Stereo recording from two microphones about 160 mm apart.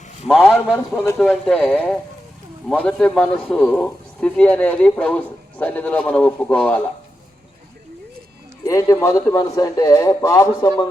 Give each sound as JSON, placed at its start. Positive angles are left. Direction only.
{"t": 0.3, "sound": "a man's voice", "side_deg": 5}
{"t": 8.6, "sound": "a man's voice", "side_deg": 20}